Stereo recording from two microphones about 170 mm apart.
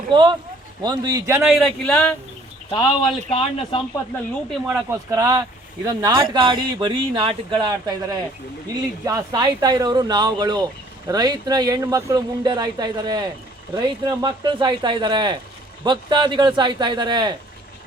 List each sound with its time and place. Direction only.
0.1 s speech: 25° right (ahead or behind)
1.4 s speech: centre (ahead or behind)
2.6 s speech: 25° left (ahead or behind)
4.4 s speech: 5° right (ahead or behind)
4.9 s speech: 20° right (ahead or behind)